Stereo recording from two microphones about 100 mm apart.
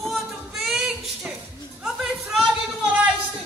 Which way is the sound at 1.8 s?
5° right (ahead or behind).